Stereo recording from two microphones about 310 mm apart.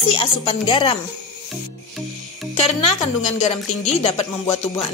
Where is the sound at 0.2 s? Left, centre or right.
Centre.